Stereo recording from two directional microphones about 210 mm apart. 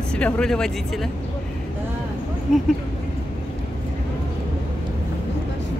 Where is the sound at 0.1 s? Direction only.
5° left (ahead or behind).